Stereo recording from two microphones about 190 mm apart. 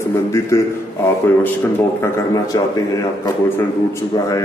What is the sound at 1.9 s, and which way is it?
Speech, 20° left (ahead or behind).